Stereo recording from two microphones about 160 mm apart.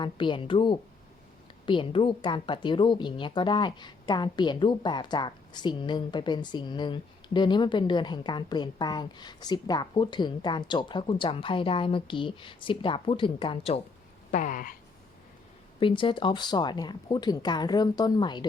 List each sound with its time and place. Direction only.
0.0 s a woman's voice: 30° left (ahead or behind)
14.3 s a sound: 55° left (ahead or behind)
15.8 s a woman's voice: 30° left (ahead or behind)